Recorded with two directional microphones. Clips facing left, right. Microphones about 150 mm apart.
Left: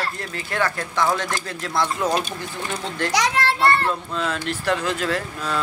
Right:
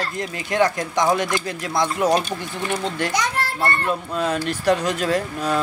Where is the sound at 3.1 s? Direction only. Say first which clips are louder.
Left 3 dB; 90° left.